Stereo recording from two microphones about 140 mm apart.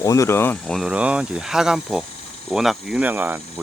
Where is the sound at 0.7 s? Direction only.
5° right (ahead or behind).